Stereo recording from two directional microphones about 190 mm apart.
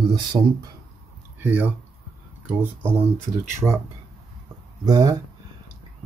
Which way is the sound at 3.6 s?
5° right (ahead or behind).